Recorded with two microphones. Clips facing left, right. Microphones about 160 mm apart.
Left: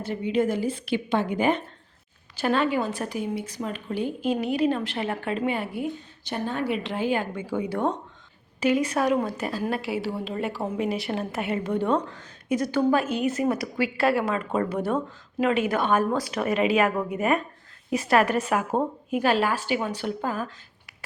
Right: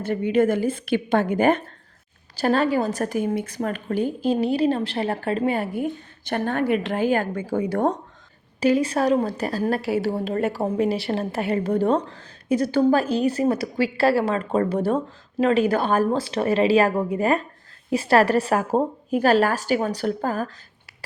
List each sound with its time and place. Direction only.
0.0 s a woman's voice: 55° right (ahead or behind)
8.6 s a woman's voice: 30° right (ahead or behind)